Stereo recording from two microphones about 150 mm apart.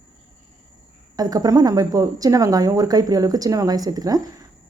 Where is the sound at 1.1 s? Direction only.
25° right (ahead or behind).